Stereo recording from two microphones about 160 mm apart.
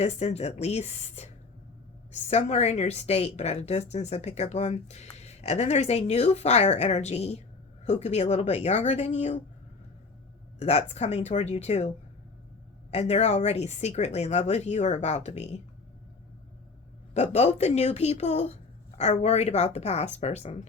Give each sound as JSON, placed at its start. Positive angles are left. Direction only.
{"t": 0.0, "sound": "a woman's voice", "side_deg": 45}
{"t": 10.6, "sound": "a woman's voice", "side_deg": 45}
{"t": 12.9, "sound": "a woman's voice", "side_deg": 40}
{"t": 17.2, "sound": "a woman's voice", "side_deg": 45}